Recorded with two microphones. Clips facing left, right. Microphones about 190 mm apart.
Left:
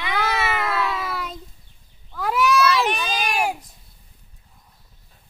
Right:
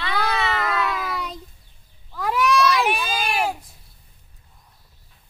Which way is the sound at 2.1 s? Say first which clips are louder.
Even; centre (ahead or behind).